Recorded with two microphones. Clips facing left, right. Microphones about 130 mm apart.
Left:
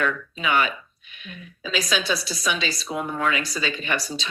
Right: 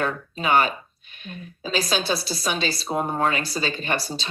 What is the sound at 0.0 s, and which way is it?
A woman's voice, 35° right (ahead or behind).